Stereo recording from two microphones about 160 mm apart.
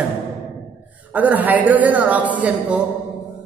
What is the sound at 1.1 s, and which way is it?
A woman's voice, 10° right (ahead or behind).